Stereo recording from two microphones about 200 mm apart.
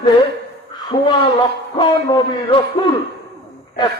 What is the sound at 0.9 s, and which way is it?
A woman's voice, 30° left (ahead or behind).